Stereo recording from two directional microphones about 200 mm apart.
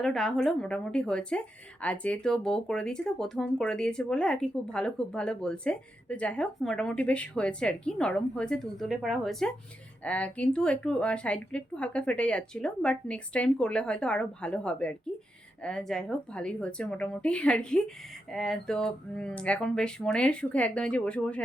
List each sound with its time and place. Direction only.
0.0 s speech: centre (ahead or behind)